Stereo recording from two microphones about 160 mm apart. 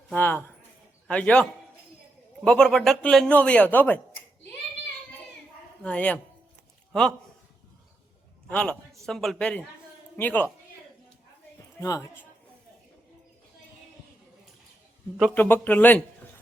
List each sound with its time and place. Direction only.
0.1 s a man's voice: 10° left (ahead or behind)
5.8 s a man's voice: 10° left (ahead or behind)
8.4 s a man's voice: 5° left (ahead or behind)
11.8 s speech: 20° left (ahead or behind)
15.4 s a man's voice: 15° left (ahead or behind)